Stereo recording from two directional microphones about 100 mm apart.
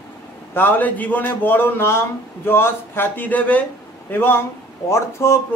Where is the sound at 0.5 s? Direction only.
15° left (ahead or behind).